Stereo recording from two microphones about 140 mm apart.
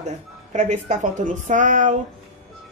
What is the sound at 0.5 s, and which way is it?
Speech, 60° right (ahead or behind).